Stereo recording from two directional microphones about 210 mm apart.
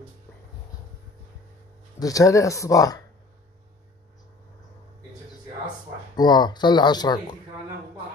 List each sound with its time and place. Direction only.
2.0 s speech: 15° left (ahead or behind)
6.1 s speech: 20° left (ahead or behind)